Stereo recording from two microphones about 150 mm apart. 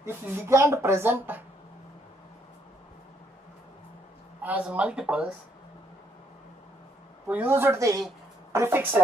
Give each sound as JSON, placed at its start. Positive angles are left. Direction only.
{"t": 0.0, "sound": "speech", "side_deg": -15}
{"t": 4.4, "sound": "speech", "side_deg": -10}
{"t": 7.2, "sound": "speech", "side_deg": -10}